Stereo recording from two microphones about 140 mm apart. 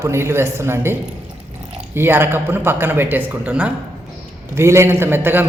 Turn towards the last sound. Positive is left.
turn(degrees=-15)  # may be behind; listen again after turning